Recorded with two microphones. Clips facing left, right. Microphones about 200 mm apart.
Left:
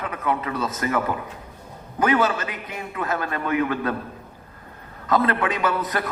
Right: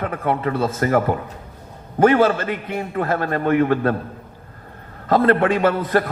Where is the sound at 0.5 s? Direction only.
30° right (ahead or behind).